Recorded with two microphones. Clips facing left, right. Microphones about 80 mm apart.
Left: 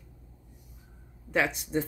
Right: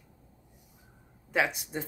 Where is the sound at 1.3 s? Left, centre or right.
Centre.